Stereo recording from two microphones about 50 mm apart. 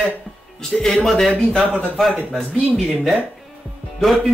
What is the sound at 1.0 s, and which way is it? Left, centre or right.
Speech, centre.